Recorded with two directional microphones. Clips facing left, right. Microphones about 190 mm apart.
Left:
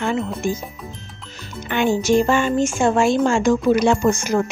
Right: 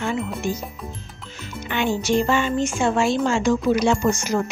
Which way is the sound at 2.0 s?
45° left (ahead or behind).